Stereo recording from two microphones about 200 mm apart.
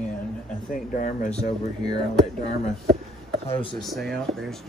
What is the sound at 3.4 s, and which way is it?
Speech, 25° left (ahead or behind).